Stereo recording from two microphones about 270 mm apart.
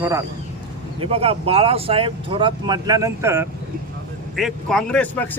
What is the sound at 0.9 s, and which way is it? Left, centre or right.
Speech, right.